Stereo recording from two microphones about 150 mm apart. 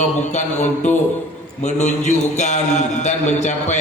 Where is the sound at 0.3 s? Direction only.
50° left (ahead or behind).